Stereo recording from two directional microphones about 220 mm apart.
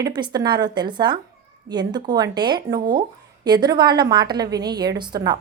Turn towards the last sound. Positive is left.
turn(degrees=-20)  # may be behind; listen again after turning